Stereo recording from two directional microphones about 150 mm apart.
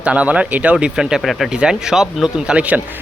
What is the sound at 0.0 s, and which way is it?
Speech, 10° right (ahead or behind).